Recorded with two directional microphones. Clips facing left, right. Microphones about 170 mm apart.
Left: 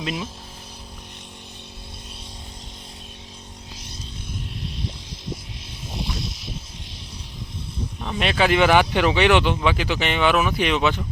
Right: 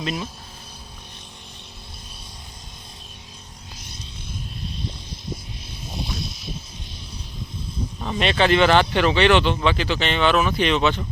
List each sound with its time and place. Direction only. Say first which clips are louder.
0.0 s speech: right 1 dB; 5° left (ahead or behind)
5.9 s vehicle: left 1 dB; 80° left
8.0 s speech: right 1 dB; 5° left (ahead or behind)